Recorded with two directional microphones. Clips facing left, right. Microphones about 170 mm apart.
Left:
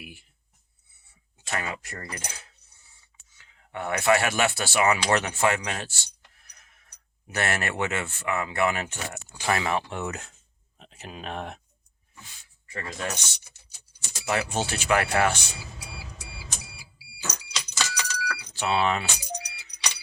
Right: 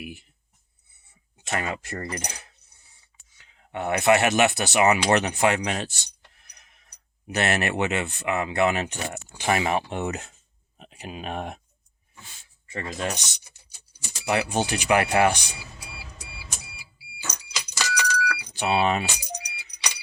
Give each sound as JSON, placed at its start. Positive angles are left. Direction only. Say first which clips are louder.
{"t": 1.5, "sound": "speech", "louder": "right 3 dB", "side_deg": -25}
{"t": 3.3, "sound": "speech", "louder": "right 3 dB", "side_deg": -20}
{"t": 5.1, "sound": "music", "louder": "right 2 dB", "side_deg": -20}
{"t": 7.3, "sound": "speech", "louder": "right 4 dB", "side_deg": -20}
{"t": 12.6, "sound": "speech", "louder": "right 3 dB", "side_deg": -20}
{"t": 17.7, "sound": "keys jangling", "louder": "right 6 dB", "side_deg": -10}